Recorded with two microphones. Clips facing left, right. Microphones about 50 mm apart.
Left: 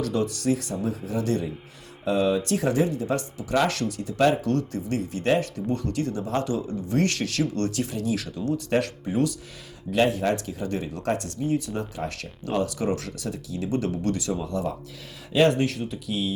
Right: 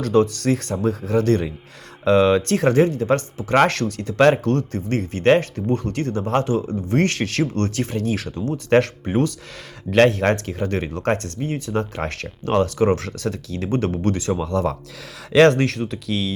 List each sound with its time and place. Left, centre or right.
0.0 s speech: right
2.0 s speech: right
8.7 s speech: right
9.9 s speech: right
14.3 s speech: right
15.3 s speech: right